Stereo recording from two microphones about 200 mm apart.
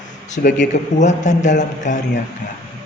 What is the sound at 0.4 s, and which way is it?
Speech, 45° left (ahead or behind).